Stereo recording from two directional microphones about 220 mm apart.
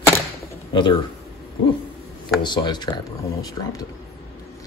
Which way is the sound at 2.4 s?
20° left (ahead or behind).